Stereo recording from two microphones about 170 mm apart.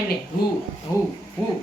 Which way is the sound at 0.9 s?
20° left (ahead or behind).